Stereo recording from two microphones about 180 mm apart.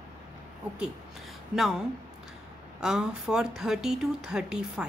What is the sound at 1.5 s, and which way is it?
A woman's voice, centre (ahead or behind).